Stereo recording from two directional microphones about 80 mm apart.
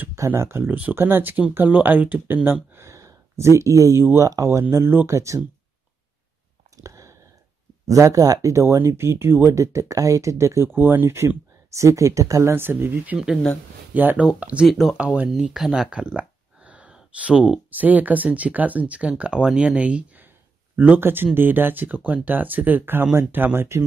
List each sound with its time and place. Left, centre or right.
0.1 s speech: right
0.7 s speech: right
6.8 s a sound: right
7.8 s speech: right; by 14.7 s centre
14.7 s speech: centre
15.0 s speech: centre
15.3 s speech: centre; by 23.9 s right